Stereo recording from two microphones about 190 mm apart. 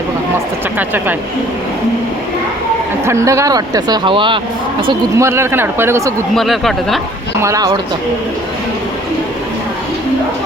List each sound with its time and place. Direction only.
0.8 s speech: 10° right (ahead or behind)
3.1 s speech: 15° right (ahead or behind)
5.1 s speech: 15° right (ahead or behind)
6.3 s speech: centre (ahead or behind)
7.4 s speech: 20° right (ahead or behind)